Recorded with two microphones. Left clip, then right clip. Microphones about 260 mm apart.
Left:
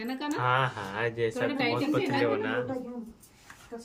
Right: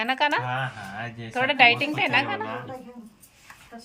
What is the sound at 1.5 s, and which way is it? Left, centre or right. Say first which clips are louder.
Speech: right 10 dB; centre.